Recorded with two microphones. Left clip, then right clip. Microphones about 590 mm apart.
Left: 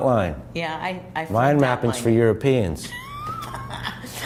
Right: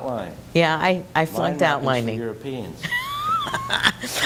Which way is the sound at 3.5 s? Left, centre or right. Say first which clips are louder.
Right 11 dB; right.